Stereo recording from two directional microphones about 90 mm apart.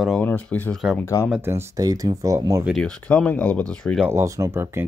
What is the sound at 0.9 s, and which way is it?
Speech, 30° left (ahead or behind).